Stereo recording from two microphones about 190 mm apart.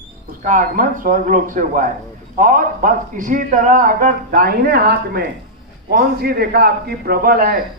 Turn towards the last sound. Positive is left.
turn(degrees=-50)  # may be behind; listen again after turning